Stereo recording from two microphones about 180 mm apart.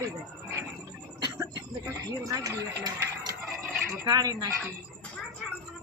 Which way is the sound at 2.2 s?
20° right (ahead or behind).